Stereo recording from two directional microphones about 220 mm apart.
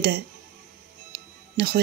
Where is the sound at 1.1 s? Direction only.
45° right (ahead or behind).